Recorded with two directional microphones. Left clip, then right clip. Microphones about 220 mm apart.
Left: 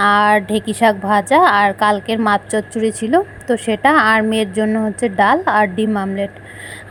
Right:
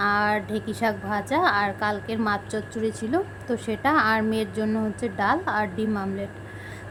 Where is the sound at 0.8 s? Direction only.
25° left (ahead or behind).